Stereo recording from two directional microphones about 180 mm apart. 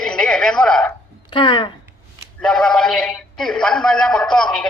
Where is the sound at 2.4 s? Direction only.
5° left (ahead or behind).